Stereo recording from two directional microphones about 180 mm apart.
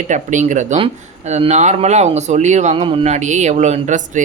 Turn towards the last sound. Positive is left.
turn(degrees=-40)  # may be behind; listen again after turning